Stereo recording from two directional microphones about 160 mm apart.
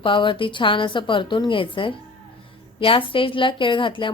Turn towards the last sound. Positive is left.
turn(degrees=30)  # may be behind; listen again after turning